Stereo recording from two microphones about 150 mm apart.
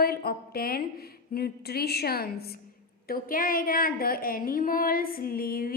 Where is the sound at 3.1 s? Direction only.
70° left (ahead or behind).